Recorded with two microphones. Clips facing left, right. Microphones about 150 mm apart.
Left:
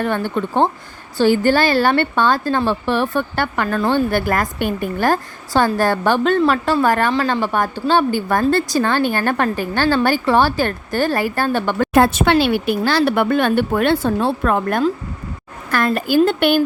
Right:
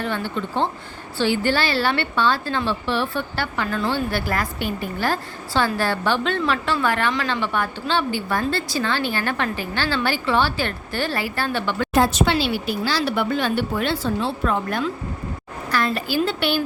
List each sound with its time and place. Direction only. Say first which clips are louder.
0.0 s speech: left 6 dB; 50° left (ahead or behind)